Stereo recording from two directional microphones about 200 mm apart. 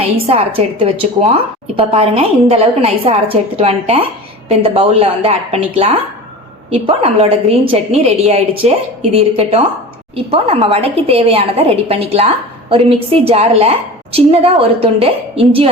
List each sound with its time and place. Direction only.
0.3 s a woman's voice: 30° right (ahead or behind)